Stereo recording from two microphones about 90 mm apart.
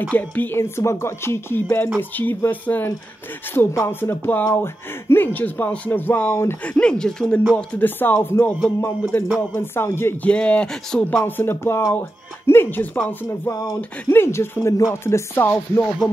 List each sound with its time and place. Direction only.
0.1 s chopping: 15° left (ahead or behind)
3.5 s chopping: 30° left (ahead or behind)
6.6 s speech: 10° left (ahead or behind)
7.5 s chopping: 20° left (ahead or behind)
10.2 s speech: 10° left (ahead or behind)
11.2 s chopping: 25° left (ahead or behind)
14.0 s chopping: 30° left (ahead or behind)